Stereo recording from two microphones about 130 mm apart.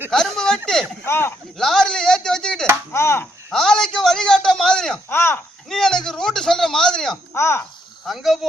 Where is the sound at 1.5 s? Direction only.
5° left (ahead or behind).